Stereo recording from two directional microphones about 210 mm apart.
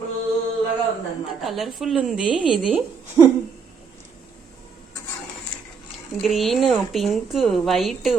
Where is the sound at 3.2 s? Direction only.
15° right (ahead or behind).